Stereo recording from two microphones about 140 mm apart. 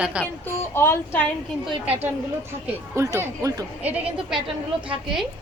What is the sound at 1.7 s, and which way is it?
Speech, 45° right (ahead or behind).